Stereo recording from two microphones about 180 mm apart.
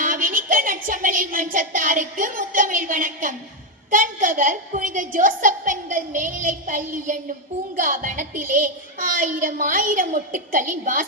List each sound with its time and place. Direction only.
0.0 s child singing: 50° right (ahead or behind)
3.9 s a woman's voice: 45° right (ahead or behind)